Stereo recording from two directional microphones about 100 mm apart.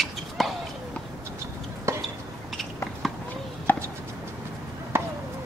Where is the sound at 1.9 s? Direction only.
30° right (ahead or behind).